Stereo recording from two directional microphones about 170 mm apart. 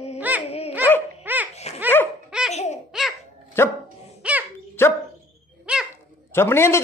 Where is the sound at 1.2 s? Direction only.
10° right (ahead or behind).